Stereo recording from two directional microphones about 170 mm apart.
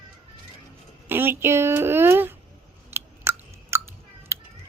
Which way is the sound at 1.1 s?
15° right (ahead or behind).